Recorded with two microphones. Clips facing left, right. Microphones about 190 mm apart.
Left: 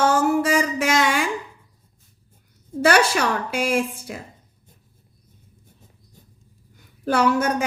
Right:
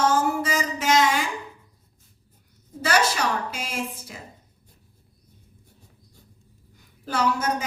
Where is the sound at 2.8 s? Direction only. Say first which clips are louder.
Left 5 dB; 65° left (ahead or behind).